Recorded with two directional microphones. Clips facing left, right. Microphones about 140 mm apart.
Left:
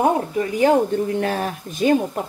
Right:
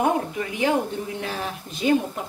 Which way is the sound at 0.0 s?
40° left (ahead or behind).